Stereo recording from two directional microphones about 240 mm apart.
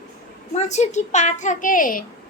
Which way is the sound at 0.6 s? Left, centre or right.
Left.